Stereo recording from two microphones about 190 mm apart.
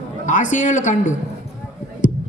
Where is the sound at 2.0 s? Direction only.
45° left (ahead or behind).